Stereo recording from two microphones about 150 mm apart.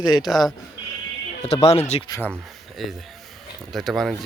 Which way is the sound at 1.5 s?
45° left (ahead or behind).